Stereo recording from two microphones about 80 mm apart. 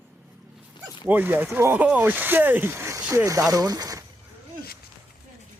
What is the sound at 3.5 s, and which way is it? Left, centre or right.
Speech, right.